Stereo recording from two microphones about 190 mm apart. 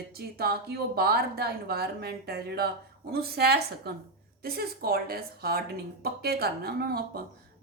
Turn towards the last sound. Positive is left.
turn(degrees=-55)  # may be behind; listen again after turning